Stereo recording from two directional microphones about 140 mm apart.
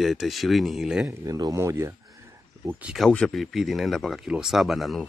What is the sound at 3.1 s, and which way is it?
Speech, 5° left (ahead or behind).